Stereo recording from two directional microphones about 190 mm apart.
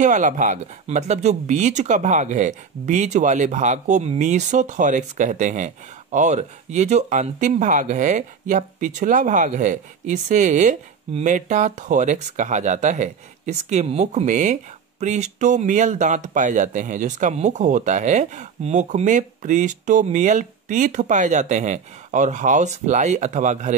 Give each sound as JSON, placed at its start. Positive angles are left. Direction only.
{"t": 0.0, "sound": "speech", "side_deg": -40}